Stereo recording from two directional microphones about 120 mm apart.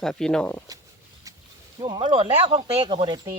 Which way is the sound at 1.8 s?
50° right (ahead or behind).